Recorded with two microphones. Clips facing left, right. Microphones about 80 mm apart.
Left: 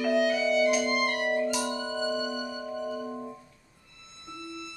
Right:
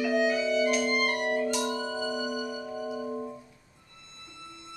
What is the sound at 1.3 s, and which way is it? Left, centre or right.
Music, centre.